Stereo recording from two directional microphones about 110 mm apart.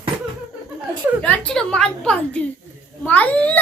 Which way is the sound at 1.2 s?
10° left (ahead or behind).